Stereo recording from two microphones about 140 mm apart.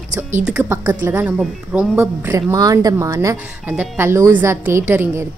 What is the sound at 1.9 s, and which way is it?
A woman's voice, 20° right (ahead or behind).